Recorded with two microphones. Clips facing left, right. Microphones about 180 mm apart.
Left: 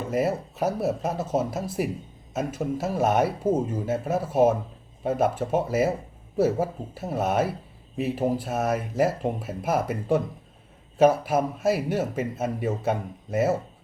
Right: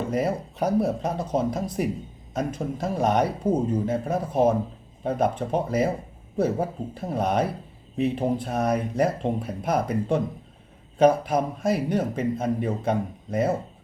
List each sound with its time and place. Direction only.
0.1 s a man's voice: 5° left (ahead or behind)